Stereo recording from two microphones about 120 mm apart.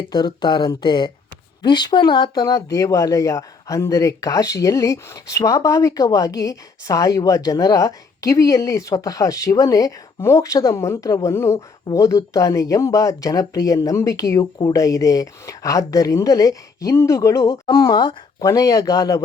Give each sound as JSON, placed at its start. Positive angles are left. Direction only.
{"t": 0.1, "sound": "speech", "side_deg": 35}